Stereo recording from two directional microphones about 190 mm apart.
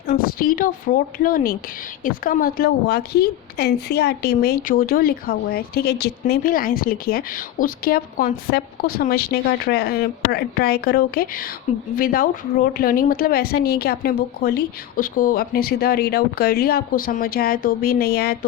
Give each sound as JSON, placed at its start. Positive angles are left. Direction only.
{"t": 0.2, "sound": "a woman's voice", "side_deg": 50}